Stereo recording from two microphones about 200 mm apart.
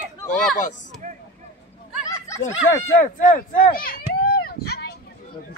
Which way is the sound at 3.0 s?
45° left (ahead or behind).